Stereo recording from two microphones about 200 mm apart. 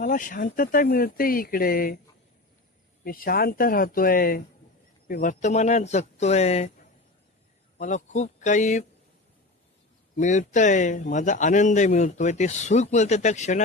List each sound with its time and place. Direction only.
0.0 s speech: 40° left (ahead or behind)
3.0 s a man's voice: 45° left (ahead or behind)
7.8 s a man's voice: 35° left (ahead or behind)
10.2 s a man's voice: 40° left (ahead or behind)